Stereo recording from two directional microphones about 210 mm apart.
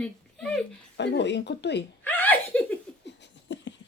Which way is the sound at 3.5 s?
60° left (ahead or behind).